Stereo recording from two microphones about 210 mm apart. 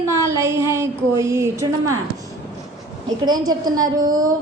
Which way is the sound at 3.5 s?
20° right (ahead or behind).